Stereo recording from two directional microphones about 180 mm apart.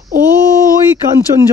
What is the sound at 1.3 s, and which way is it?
Speech, 30° right (ahead or behind).